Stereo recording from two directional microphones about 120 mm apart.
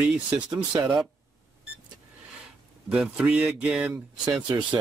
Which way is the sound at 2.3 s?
5° right (ahead or behind).